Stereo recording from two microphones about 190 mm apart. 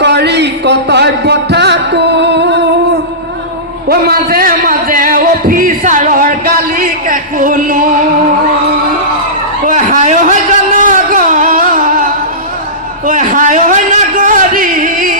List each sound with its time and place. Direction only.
0.0 s music: 65° right (ahead or behind)
3.8 s music: 55° right (ahead or behind)
9.6 s a sound: 45° right (ahead or behind)